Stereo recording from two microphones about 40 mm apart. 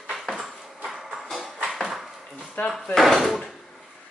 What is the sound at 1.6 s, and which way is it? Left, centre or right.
Dog, centre.